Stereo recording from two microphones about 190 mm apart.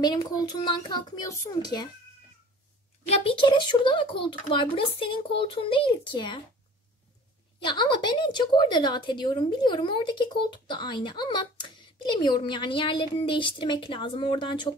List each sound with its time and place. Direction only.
0.0 s a woman's voice: 20° left (ahead or behind)
3.1 s a woman's voice: 25° left (ahead or behind)
7.6 s a woman's voice: 25° left (ahead or behind)